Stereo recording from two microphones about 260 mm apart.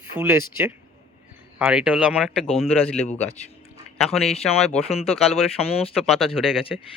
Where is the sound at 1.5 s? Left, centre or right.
Centre.